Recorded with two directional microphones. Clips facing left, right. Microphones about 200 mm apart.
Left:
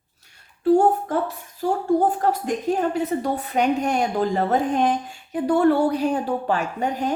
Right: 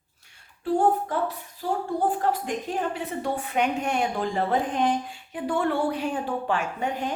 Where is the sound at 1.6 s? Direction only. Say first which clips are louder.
Left 5 dB; 45° left (ahead or behind).